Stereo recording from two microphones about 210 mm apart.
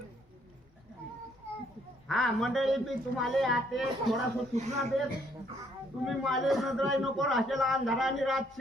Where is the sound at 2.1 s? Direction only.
Centre (ahead or behind).